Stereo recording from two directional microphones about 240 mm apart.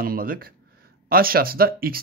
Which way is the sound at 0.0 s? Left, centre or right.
Right.